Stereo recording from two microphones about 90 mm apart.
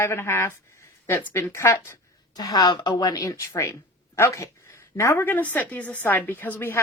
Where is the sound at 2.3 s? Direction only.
45° left (ahead or behind).